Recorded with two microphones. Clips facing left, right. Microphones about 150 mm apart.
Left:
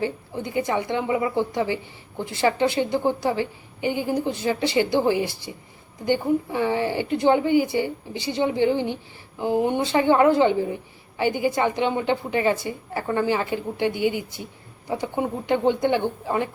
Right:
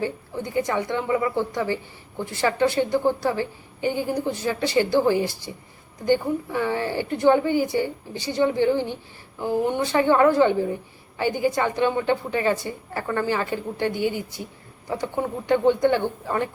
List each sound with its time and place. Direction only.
0.7 s a woman's voice: 20° left (ahead or behind)